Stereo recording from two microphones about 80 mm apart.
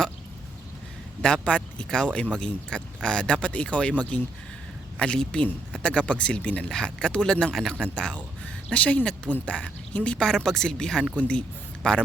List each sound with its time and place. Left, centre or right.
1.2 s a man's voice: centre